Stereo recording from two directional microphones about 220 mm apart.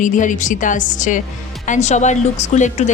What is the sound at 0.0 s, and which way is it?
Speech, 35° left (ahead or behind).